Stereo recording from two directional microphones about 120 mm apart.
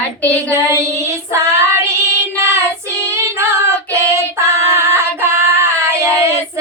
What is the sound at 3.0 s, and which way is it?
Child singing, 20° right (ahead or behind).